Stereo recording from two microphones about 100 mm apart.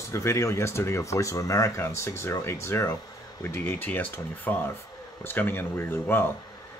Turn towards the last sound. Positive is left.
turn(degrees=20)  # may be behind; listen again after turning